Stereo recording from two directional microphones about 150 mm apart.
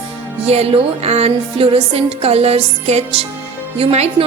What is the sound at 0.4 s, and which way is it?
Speech, 45° right (ahead or behind).